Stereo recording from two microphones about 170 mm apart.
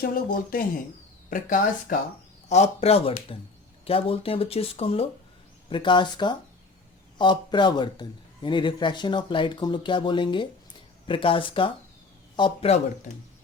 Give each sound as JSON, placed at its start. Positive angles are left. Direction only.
{"t": 0.0, "sound": "speech", "side_deg": 60}
{"t": 2.5, "sound": "a man's voice", "side_deg": 40}